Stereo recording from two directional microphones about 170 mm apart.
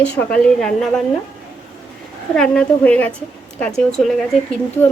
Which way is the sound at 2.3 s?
5° left (ahead or behind).